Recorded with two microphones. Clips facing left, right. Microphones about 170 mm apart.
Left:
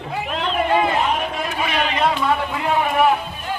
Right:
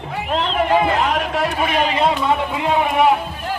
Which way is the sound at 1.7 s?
35° right (ahead or behind).